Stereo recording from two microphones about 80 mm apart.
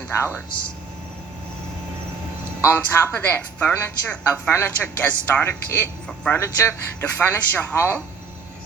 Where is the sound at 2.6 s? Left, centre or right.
Left.